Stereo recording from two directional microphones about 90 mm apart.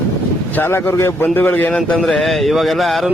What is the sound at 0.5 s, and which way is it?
Speech, 20° left (ahead or behind).